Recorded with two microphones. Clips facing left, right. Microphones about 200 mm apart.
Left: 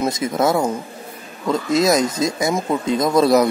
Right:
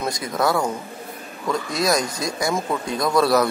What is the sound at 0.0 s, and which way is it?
Speech, 25° left (ahead or behind).